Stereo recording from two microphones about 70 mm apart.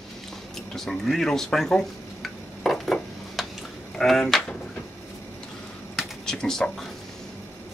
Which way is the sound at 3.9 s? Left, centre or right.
Centre.